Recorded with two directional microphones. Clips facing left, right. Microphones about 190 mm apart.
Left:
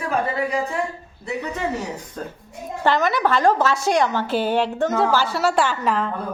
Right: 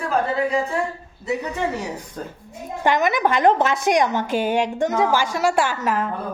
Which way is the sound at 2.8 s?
15° right (ahead or behind).